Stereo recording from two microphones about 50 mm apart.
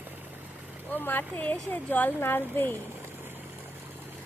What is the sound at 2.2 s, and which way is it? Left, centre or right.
Speech, left.